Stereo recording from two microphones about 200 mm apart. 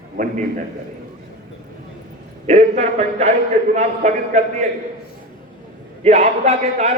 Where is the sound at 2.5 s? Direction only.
35° right (ahead or behind).